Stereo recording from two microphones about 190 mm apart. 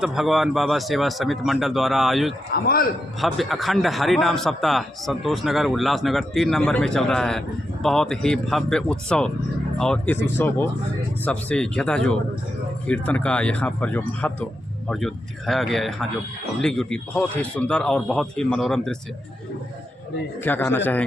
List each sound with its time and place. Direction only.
0.0 s a man's voice: centre (ahead or behind)
2.5 s a man's voice: 55° left (ahead or behind)
3.2 s a man's voice: centre (ahead or behind)
20.4 s speech: 10° left (ahead or behind)